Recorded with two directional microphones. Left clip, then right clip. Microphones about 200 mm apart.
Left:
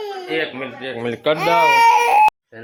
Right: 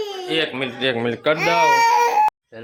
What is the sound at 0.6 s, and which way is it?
Speech, 50° right (ahead or behind).